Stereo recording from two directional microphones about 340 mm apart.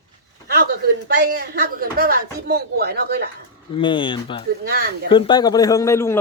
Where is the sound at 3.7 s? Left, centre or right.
Centre.